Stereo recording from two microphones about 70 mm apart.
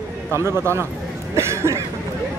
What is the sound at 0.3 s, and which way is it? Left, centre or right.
Speech, right.